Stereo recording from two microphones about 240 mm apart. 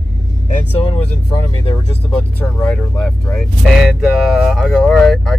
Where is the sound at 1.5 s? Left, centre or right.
Centre.